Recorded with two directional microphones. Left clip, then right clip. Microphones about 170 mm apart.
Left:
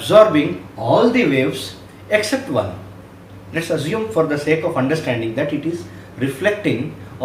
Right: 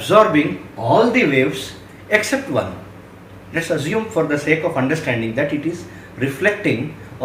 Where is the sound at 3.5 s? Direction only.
10° left (ahead or behind).